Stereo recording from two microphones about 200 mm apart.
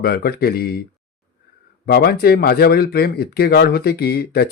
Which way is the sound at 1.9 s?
50° left (ahead or behind).